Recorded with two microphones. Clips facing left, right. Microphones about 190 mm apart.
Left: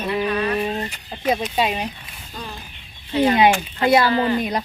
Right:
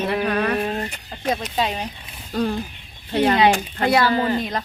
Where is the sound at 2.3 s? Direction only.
70° right (ahead or behind).